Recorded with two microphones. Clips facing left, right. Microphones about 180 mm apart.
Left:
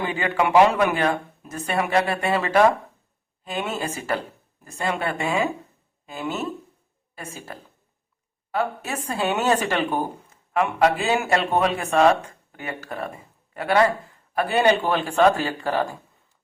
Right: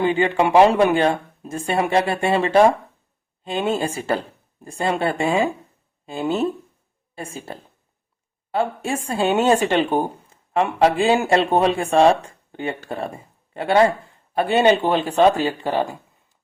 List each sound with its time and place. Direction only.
0.0 s speech: 25° right (ahead or behind)